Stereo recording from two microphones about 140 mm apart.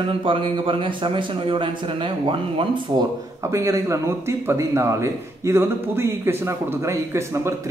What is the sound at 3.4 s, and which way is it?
Speech, 20° right (ahead or behind).